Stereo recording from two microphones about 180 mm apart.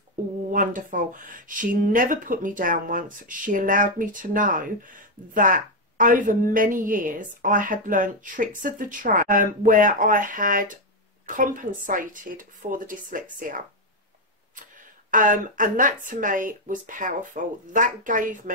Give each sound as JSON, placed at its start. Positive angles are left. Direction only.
{"t": 0.5, "sound": "speech", "side_deg": -45}
{"t": 15.0, "sound": "speech", "side_deg": -45}